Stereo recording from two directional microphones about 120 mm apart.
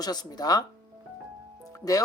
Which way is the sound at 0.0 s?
35° left (ahead or behind).